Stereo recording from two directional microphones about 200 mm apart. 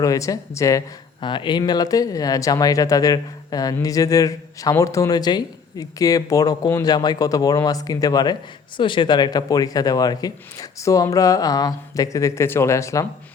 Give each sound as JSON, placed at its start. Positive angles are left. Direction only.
{"t": 0.0, "sound": "speech", "side_deg": 15}